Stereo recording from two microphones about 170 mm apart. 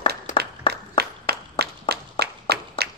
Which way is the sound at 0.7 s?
70° right (ahead or behind).